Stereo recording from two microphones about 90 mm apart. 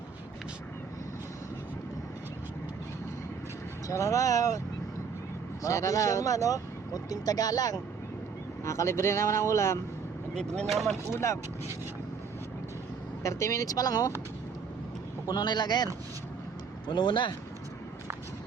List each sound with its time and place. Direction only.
3.8 s speech: 35° left (ahead or behind)
5.6 s speech: 35° left (ahead or behind)
8.6 s speech: 35° left (ahead or behind)
10.3 s speech: 10° left (ahead or behind)
10.7 s speech: centre (ahead or behind)
13.2 s speech: 35° left (ahead or behind)
15.3 s a man's voice: 50° left (ahead or behind)